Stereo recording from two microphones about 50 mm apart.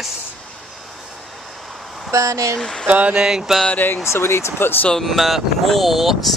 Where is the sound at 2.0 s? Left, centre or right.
Right.